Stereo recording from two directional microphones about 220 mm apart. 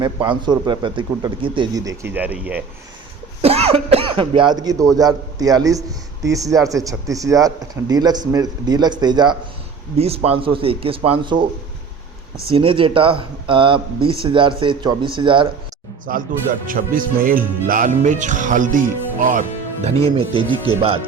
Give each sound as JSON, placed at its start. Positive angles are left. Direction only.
{"t": 0.0, "sound": "speech", "side_deg": -20}
{"t": 3.4, "sound": "a man's voice", "side_deg": -25}
{"t": 12.5, "sound": "speech", "side_deg": -25}
{"t": 16.0, "sound": "speech", "side_deg": -40}